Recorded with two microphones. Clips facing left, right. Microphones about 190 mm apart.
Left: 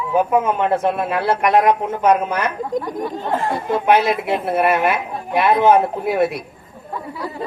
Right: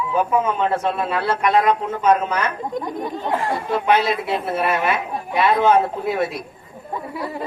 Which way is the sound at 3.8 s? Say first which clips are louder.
Left 4 dB; 60° left (ahead or behind).